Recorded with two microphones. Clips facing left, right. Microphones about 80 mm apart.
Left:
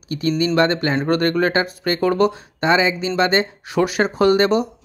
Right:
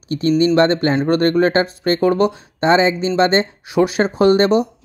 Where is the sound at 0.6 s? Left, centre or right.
Right.